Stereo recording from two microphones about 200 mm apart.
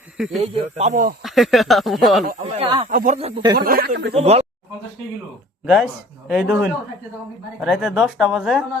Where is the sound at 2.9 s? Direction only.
45° right (ahead or behind).